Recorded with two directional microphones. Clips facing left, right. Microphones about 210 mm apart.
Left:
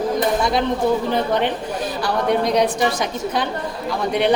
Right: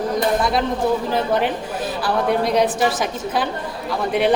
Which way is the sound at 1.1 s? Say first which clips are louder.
Even; 5° right (ahead or behind).